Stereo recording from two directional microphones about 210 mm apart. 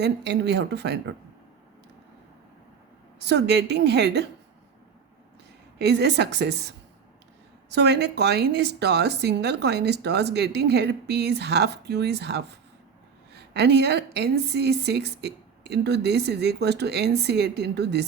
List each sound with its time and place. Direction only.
0.0 s speech: 55° right (ahead or behind)
3.2 s speech: 55° right (ahead or behind)
5.8 s speech: 55° right (ahead or behind)
7.7 s speech: 55° right (ahead or behind)